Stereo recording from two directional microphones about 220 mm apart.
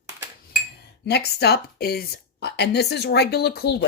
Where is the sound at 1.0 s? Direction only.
50° left (ahead or behind).